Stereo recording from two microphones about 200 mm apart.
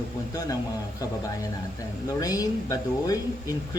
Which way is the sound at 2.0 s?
20° left (ahead or behind).